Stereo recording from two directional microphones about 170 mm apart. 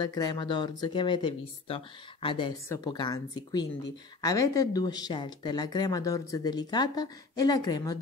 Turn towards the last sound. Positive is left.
turn(degrees=25)  # may be behind; listen again after turning